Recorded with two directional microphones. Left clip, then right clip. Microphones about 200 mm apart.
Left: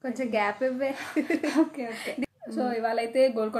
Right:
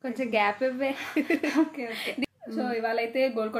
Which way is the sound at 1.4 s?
15° left (ahead or behind).